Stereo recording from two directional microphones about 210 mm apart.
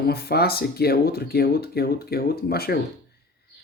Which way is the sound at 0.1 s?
50° left (ahead or behind).